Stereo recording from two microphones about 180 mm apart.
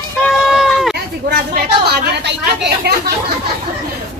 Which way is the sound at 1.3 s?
60° right (ahead or behind).